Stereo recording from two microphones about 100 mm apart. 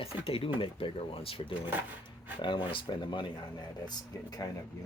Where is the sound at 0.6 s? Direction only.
60° left (ahead or behind).